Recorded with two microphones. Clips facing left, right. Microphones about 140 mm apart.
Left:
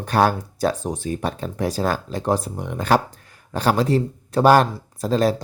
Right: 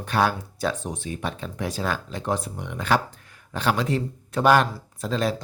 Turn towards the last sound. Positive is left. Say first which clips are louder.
# left 6 dB
turn(degrees=40)  # may be behind; listen again after turning